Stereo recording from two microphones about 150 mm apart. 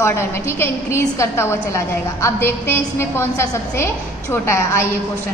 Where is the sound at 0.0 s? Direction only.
15° left (ahead or behind).